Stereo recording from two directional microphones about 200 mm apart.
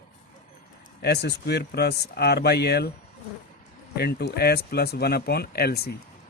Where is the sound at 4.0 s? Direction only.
55° left (ahead or behind).